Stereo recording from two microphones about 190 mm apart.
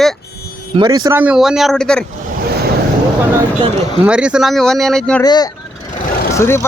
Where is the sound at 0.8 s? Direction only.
20° right (ahead or behind).